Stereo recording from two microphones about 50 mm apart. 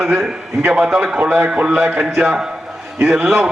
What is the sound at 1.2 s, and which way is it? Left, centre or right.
Speech, right.